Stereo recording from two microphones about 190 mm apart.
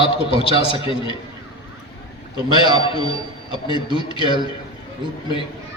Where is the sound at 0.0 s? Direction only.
25° left (ahead or behind).